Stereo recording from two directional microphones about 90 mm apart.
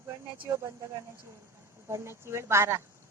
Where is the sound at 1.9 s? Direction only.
30° right (ahead or behind).